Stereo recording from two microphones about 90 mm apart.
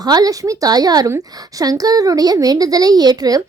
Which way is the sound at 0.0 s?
45° right (ahead or behind).